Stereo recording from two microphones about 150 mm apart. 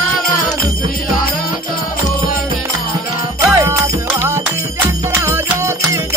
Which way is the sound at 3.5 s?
20° right (ahead or behind).